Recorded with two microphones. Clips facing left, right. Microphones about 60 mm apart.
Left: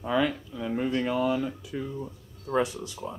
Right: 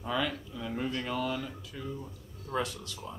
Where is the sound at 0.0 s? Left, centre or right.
Centre.